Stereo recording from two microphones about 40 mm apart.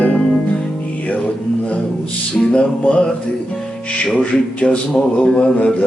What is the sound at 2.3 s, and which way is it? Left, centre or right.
Mantra, left.